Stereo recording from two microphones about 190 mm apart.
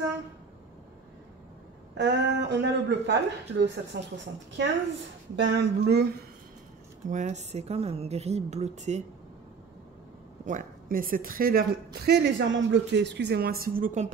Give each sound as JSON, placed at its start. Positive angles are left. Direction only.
{"t": 2.0, "sound": "speech", "side_deg": -65}
{"t": 5.3, "sound": "speech", "side_deg": -65}
{"t": 7.1, "sound": "a woman's voice", "side_deg": -40}
{"t": 10.4, "sound": "a woman's voice", "side_deg": -45}